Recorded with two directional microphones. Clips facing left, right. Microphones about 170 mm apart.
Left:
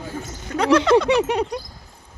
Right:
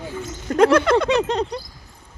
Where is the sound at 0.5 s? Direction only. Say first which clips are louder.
Right 1 dB; 50° right (ahead or behind).